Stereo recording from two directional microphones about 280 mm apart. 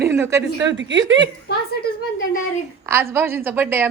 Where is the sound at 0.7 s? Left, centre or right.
Right.